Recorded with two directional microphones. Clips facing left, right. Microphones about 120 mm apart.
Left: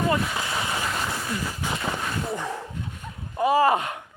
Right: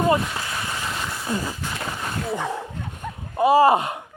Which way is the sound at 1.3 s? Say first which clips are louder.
Right 8 dB; 30° right (ahead or behind).